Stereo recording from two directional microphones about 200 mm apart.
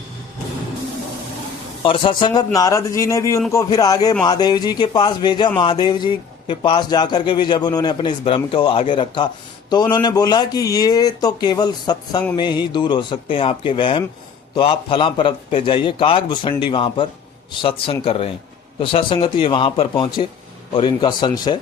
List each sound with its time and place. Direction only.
1.8 s a man's voice: 25° left (ahead or behind)